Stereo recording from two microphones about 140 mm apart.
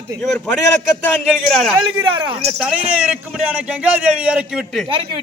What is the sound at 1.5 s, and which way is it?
A man's voice, centre (ahead or behind).